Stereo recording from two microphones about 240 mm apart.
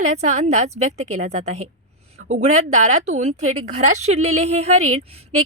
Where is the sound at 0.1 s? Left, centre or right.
Right.